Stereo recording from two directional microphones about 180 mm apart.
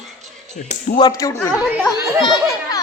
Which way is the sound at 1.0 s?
20° left (ahead or behind).